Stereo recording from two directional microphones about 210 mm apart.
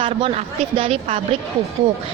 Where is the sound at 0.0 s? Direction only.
25° right (ahead or behind).